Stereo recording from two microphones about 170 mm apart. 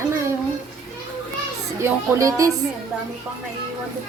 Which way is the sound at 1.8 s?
20° right (ahead or behind).